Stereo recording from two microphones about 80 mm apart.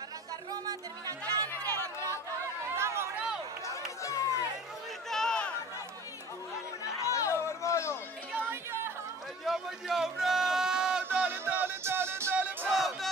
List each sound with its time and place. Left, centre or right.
0.5 s music: right
2.7 s chatter: right
4.0 s chatter: left
5.1 s chatter: centre
6.8 s chatter: left
8.4 s music: right
9.4 s a sound: centre
11.1 s music: right
12.6 s music: centre